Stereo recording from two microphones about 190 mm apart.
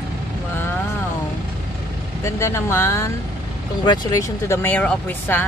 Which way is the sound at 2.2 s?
15° left (ahead or behind).